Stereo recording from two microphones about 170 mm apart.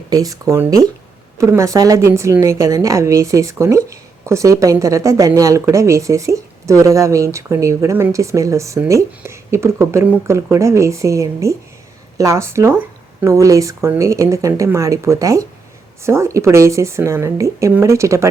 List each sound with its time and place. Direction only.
0.1 s a woman's voice: 20° right (ahead or behind)